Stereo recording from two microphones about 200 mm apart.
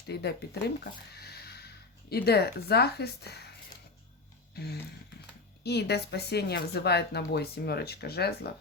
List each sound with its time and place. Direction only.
0.1 s speech: 55° left (ahead or behind)
4.5 s music: 55° left (ahead or behind)
5.6 s a woman's voice: 55° left (ahead or behind)